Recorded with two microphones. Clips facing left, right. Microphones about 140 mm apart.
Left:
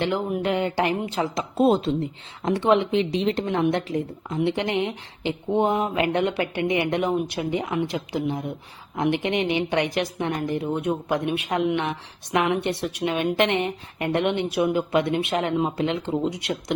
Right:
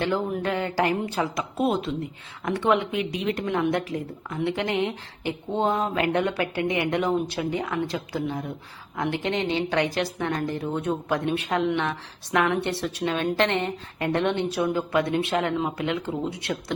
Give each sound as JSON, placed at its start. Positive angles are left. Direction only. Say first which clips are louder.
{"t": 0.1, "sound": "a woman's voice", "louder": "left 2 dB", "side_deg": 15}